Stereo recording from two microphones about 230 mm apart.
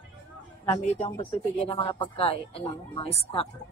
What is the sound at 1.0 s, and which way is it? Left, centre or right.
Speech, centre.